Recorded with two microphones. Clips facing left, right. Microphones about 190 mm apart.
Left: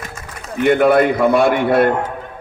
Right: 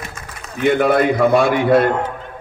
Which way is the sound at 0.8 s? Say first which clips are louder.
Left 1 dB; 55° left (ahead or behind).